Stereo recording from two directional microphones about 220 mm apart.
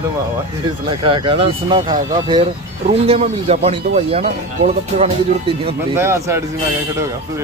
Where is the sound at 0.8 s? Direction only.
25° right (ahead or behind).